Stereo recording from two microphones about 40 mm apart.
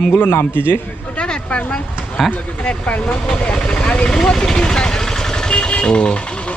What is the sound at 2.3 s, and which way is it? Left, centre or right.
Speech, left.